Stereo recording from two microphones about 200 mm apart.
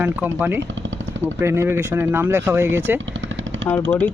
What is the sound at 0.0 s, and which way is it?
Speech, 10° right (ahead or behind).